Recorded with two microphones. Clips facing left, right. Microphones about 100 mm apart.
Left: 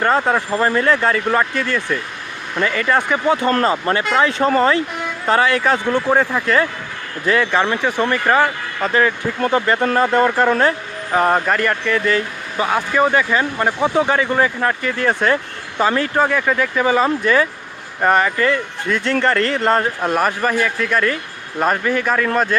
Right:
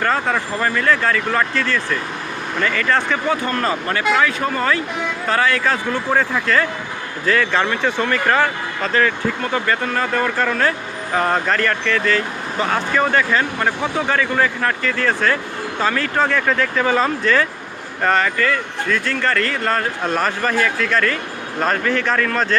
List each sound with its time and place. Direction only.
0.0 s speech: 20° left (ahead or behind)
20.0 s speech: 10° left (ahead or behind)